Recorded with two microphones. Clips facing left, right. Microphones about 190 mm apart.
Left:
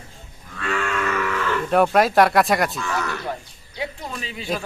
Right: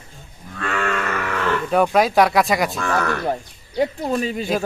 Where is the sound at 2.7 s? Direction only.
55° right (ahead or behind).